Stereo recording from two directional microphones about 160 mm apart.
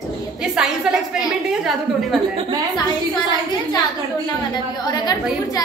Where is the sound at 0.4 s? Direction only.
5° right (ahead or behind).